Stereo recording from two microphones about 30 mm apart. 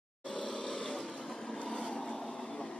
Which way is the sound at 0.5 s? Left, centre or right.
Centre.